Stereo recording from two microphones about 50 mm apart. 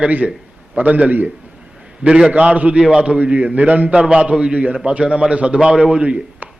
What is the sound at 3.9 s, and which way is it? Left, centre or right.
A man's voice, centre.